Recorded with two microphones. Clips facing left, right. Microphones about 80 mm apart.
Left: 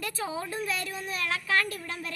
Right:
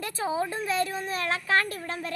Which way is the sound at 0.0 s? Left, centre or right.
Right.